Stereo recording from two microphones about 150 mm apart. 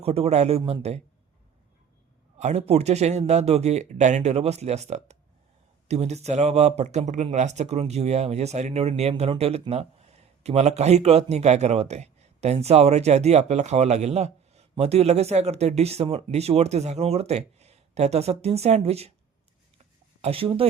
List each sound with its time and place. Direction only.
0.0 s speech: 45° right (ahead or behind)
2.4 s speech: 50° right (ahead or behind)
20.2 s speech: 40° right (ahead or behind)